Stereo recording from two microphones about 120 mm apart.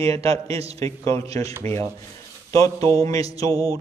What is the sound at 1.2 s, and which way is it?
Speech, 60° right (ahead or behind).